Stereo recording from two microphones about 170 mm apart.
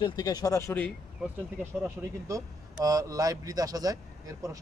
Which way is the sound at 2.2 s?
20° right (ahead or behind).